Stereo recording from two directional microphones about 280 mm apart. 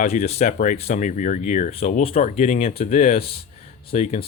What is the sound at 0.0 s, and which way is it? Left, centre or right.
Speech, left.